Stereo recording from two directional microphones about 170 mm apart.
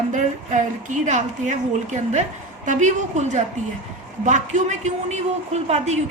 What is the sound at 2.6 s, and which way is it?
A woman's voice, 45° right (ahead or behind).